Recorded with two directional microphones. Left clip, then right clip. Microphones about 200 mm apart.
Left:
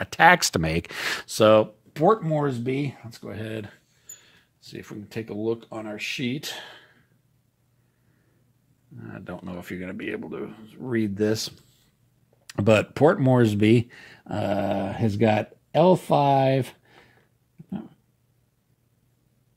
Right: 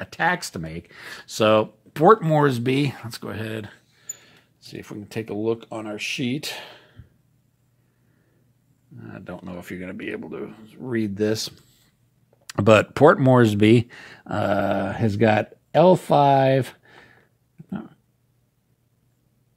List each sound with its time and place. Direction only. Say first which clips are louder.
0.0 s speech: left 6 dB; 30° left (ahead or behind); by 1.1 s 50° left (ahead or behind)
1.2 s speech: left 1 dB; 20° left (ahead or behind)
2.2 s speech: right 6 dB; 40° right (ahead or behind)
3.3 s speech: right 2 dB; 10° right (ahead or behind)
4.1 s speech: right 7 dB; 15° right (ahead or behind)
8.9 s speech: right 1 dB; centre (ahead or behind)